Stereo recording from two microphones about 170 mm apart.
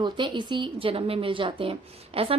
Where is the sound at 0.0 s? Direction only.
25° right (ahead or behind).